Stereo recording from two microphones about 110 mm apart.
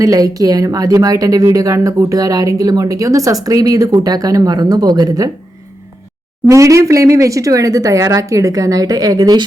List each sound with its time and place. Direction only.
0.0 s speech: 35° right (ahead or behind)
6.5 s speech: 30° right (ahead or behind)